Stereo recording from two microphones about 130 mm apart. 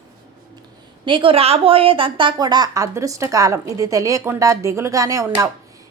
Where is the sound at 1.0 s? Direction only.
40° right (ahead or behind).